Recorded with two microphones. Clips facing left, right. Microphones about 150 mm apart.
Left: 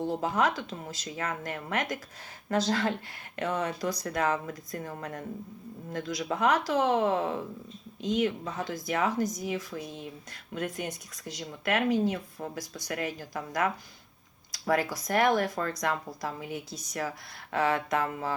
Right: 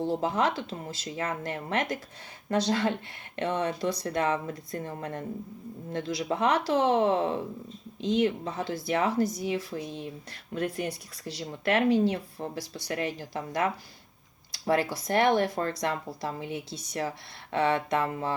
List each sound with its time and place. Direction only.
0.0 s speech: 30° right (ahead or behind)
9.8 s speech: centre (ahead or behind)
10.5 s speech: 35° right (ahead or behind)